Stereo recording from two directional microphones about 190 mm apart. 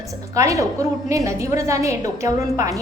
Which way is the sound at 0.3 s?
15° right (ahead or behind).